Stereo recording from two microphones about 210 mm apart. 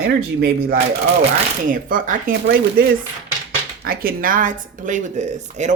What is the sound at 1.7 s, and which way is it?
Speech, 40° right (ahead or behind).